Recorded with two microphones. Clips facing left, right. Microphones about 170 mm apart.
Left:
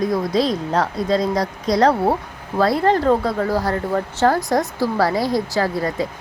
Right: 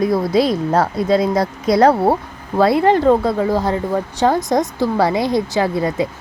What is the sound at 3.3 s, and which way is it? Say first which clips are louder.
Speech: right 3 dB; 20° right (ahead or behind).